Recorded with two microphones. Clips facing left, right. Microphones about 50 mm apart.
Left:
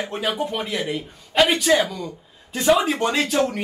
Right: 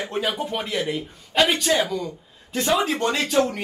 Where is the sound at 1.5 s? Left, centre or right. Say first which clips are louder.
Left 2 dB; left.